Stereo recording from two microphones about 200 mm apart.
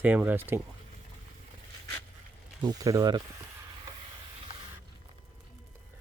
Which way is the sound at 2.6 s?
20° right (ahead or behind).